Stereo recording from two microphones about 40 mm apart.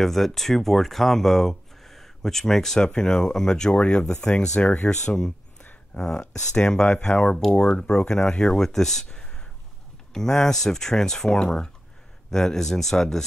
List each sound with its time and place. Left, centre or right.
0.0 s speech: centre
9.1 s a sound: left
10.1 s speech: centre